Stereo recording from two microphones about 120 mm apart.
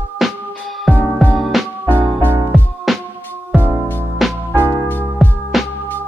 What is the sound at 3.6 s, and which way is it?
Music, 15° left (ahead or behind).